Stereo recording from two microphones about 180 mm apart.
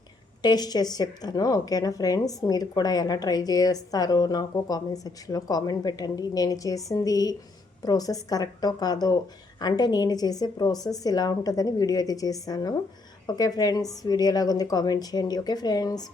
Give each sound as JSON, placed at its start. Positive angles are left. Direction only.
{"t": 0.4, "sound": "a woman's voice", "side_deg": 20}